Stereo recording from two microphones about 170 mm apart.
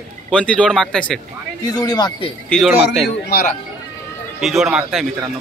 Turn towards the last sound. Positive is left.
turn(degrees=-5)  # may be behind; listen again after turning